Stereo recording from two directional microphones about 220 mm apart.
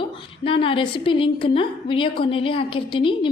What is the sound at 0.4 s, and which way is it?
A woman's voice, 25° left (ahead or behind).